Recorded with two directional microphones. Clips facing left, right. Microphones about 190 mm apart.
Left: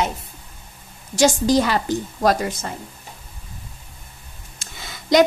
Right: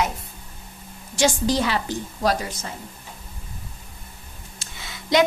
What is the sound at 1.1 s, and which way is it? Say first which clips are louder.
Speech: left 4 dB; 45° left (ahead or behind).